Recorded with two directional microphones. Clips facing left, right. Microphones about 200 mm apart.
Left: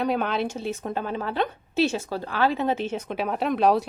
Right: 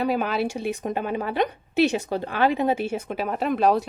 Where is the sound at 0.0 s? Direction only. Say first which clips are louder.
Right 1 dB; 5° right (ahead or behind).